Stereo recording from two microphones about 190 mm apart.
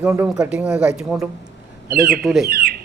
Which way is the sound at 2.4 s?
55° right (ahead or behind).